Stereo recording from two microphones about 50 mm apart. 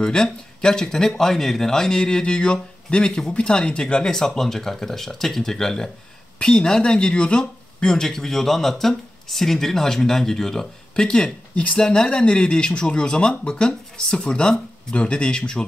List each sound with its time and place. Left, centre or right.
0.0 s speech: centre
11.5 s speech: left
11.8 s speech: centre